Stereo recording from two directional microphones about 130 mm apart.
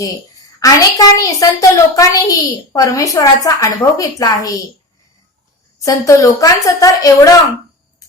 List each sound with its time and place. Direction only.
0.0 s a woman's voice: 25° left (ahead or behind)
5.8 s a woman's voice: 25° left (ahead or behind)